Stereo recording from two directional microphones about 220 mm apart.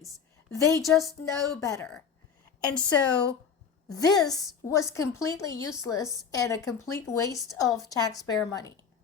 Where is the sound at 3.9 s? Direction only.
15° left (ahead or behind).